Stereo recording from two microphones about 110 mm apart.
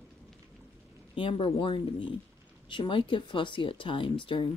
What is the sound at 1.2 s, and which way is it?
Speech, 55° left (ahead or behind).